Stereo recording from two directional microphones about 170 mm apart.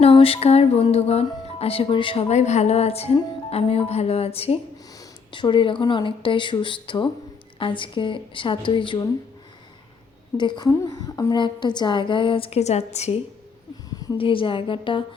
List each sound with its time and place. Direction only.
0.0 s a woman's voice: 35° left (ahead or behind)
10.3 s a woman's voice: 25° left (ahead or behind)
13.9 s a woman's voice: 20° left (ahead or behind)